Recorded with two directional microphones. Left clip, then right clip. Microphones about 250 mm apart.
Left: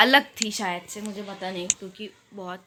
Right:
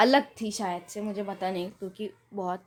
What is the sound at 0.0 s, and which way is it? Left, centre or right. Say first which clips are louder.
A woman's voice: left 4 dB; centre.